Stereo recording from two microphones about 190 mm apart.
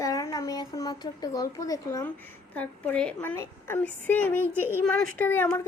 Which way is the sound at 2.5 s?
10° left (ahead or behind).